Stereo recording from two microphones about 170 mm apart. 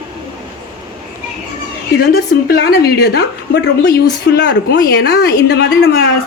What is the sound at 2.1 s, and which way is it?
A woman's voice, 65° left (ahead or behind).